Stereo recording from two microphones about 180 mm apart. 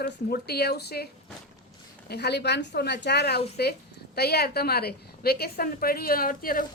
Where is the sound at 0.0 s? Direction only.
60° left (ahead or behind).